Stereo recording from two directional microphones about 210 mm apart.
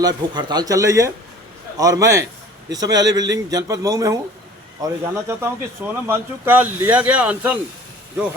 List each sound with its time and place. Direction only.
0.0 s speech: 20° right (ahead or behind)